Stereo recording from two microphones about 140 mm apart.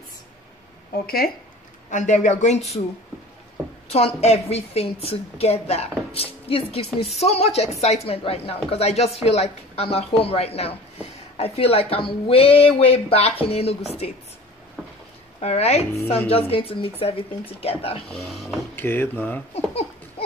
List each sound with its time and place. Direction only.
1.0 s speech: 90° left
1.9 s speech: 60° left (ahead or behind)
3.9 s a woman's voice: 50° left (ahead or behind)
15.4 s a woman's voice: 50° left (ahead or behind)
18.1 s speech: centre (ahead or behind)
18.8 s speech: 15° left (ahead or behind)
19.5 s a sound: 45° left (ahead or behind)